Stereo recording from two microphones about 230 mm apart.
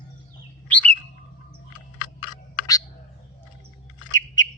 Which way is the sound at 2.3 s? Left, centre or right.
Centre.